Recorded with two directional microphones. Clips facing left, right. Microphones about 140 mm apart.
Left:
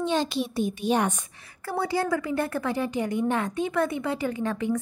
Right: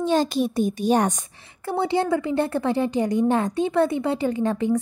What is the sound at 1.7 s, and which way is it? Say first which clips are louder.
A woman's voice: right 4 dB; 25° right (ahead or behind).